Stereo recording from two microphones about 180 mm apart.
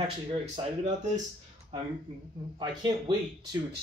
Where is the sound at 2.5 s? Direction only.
25° right (ahead or behind).